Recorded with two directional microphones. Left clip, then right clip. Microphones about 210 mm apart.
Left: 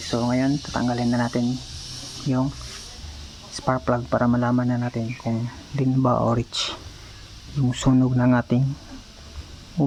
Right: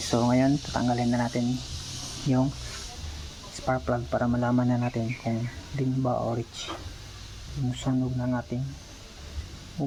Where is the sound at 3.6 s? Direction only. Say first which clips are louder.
Left 5 dB; 20° left (ahead or behind).